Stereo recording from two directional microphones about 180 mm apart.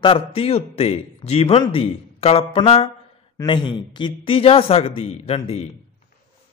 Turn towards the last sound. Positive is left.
turn(degrees=35)  # may be behind; listen again after turning